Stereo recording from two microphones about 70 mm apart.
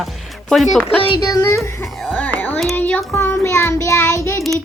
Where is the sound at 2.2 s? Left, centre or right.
Left.